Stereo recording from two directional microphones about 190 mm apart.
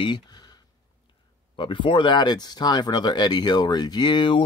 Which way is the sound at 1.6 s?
25° left (ahead or behind).